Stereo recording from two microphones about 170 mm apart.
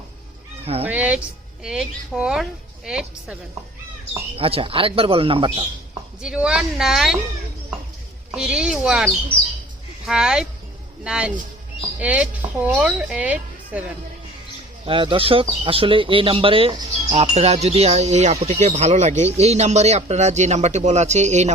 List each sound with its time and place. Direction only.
0.6 s speech: 35° right (ahead or behind)
0.9 s a woman's voice: 10° right (ahead or behind)
4.4 s speech: 35° right (ahead or behind)
6.2 s a woman's voice: 5° right (ahead or behind)
8.4 s a woman's voice: 5° right (ahead or behind)
14.8 s speech: 30° right (ahead or behind)